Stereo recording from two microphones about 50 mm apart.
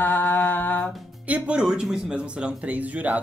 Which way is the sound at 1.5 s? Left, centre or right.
Centre.